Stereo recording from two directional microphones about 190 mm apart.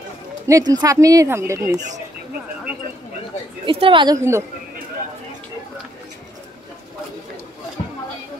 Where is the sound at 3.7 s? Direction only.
25° right (ahead or behind).